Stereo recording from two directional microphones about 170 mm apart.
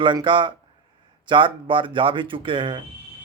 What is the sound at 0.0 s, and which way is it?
Speech, 30° right (ahead or behind).